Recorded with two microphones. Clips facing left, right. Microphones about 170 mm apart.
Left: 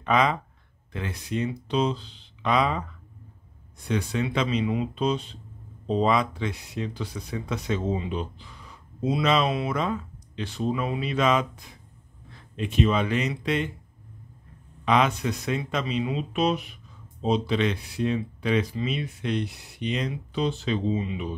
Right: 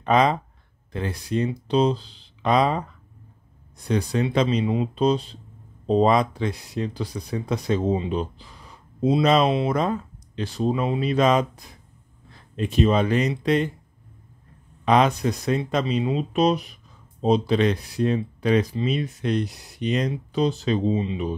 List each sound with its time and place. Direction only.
0.0 s speech: 35° right (ahead or behind)
3.8 s speech: 35° right (ahead or behind)
14.9 s speech: 40° right (ahead or behind)
20.9 s speech: 30° right (ahead or behind)